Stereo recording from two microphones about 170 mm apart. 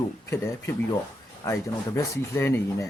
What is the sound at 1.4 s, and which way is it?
Speech, 15° left (ahead or behind).